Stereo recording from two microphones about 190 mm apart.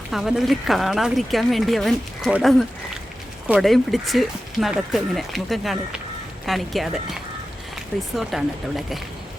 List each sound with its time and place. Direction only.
0.1 s speech: centre (ahead or behind)